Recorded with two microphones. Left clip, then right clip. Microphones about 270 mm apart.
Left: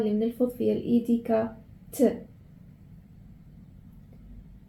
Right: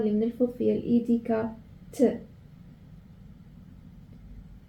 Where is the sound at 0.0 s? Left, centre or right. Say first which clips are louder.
Even; left.